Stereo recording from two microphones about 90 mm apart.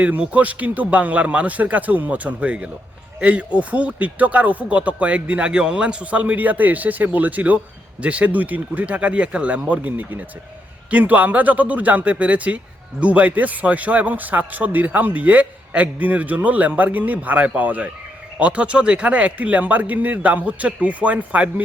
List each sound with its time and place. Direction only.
0.0 s speech: 15° right (ahead or behind)